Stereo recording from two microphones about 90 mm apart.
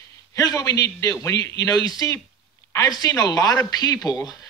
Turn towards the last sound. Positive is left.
turn(degrees=50)  # may be behind; listen again after turning